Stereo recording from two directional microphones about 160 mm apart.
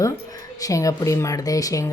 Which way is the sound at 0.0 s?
20° left (ahead or behind).